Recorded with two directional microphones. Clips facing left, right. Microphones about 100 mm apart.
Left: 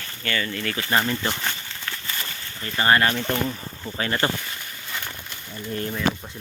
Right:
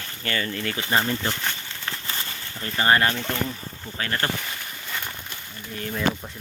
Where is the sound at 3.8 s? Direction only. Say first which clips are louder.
Left 3 dB; 15° left (ahead or behind).